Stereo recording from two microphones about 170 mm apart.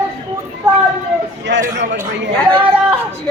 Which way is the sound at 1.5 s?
90° right.